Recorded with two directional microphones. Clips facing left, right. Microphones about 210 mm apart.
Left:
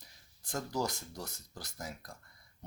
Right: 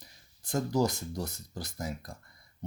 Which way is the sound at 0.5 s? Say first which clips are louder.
Right 7 dB; 20° right (ahead or behind).